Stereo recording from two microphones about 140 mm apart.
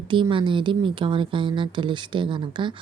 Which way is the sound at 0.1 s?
35° right (ahead or behind).